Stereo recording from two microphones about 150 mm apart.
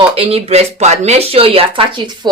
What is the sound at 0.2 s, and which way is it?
Speech, 40° right (ahead or behind).